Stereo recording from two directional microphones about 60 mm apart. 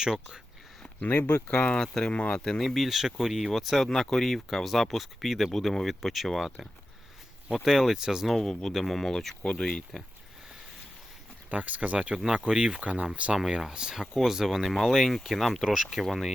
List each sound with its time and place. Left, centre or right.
0.0 s speech: centre
0.9 s speech: left; by 8.4 s centre
8.4 s speech: centre
11.5 s speech: right
13.3 s speech: centre